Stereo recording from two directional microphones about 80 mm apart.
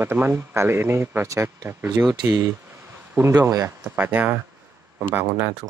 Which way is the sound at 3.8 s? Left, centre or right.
Right.